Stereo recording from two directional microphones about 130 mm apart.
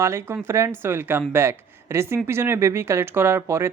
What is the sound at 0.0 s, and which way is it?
Speech, 20° right (ahead or behind).